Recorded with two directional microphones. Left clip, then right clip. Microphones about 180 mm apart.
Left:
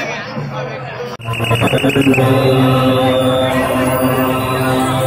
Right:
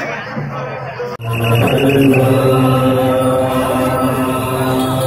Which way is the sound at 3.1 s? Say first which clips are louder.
Even; 10° right (ahead or behind).